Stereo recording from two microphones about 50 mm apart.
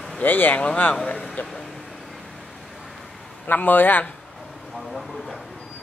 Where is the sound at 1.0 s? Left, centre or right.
Centre.